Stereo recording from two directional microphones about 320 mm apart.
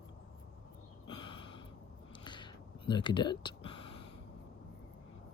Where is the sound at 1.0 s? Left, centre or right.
Centre.